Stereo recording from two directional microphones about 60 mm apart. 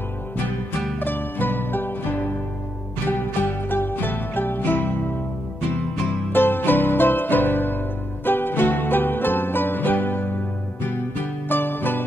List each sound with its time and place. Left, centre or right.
0.9 s music: left
6.3 s music: left